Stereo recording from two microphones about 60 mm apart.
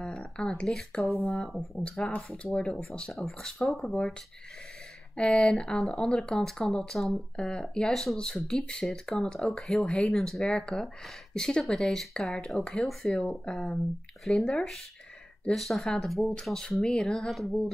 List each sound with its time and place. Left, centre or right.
0.2 s speech: centre
3.1 s speech: centre
5.1 s speech: centre
5.8 s speech: centre
13.2 s speech: centre
14.4 s speech: centre